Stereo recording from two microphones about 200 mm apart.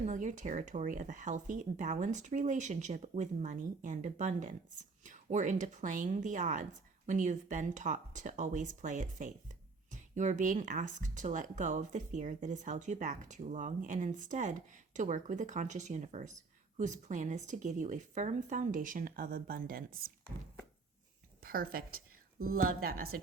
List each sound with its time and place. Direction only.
0.0 s speech: 40° right (ahead or behind)
21.4 s a woman's voice: 45° right (ahead or behind)